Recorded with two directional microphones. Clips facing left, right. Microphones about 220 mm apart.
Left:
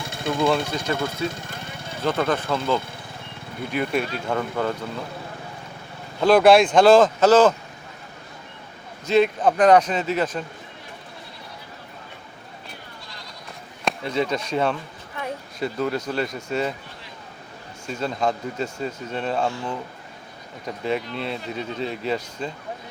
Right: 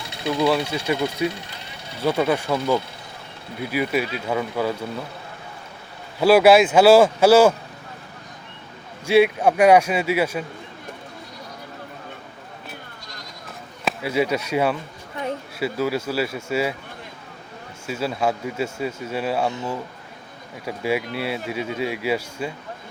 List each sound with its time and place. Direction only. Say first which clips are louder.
0.0 s a sound: right 1 dB; 50° left (ahead or behind)
0.7 s speech: right 2 dB; 10° right (ahead or behind)
1.3 s vehicle: left 1 dB; 50° left (ahead or behind)
2.0 s speech: right 2 dB; 10° right (ahead or behind)
6.1 s speech: right 1 dB; 10° right (ahead or behind)
9.0 s speech: right 2 dB; 10° right (ahead or behind)
13.8 s speech: right 2 dB; 10° right (ahead or behind)
15.2 s a sound: right 3 dB; 15° right (ahead or behind)
15.5 s speech: right 1 dB; 5° right (ahead or behind)
17.8 s speech: right 1 dB; 5° right (ahead or behind)
20.7 s speech: right 2 dB; 10° right (ahead or behind)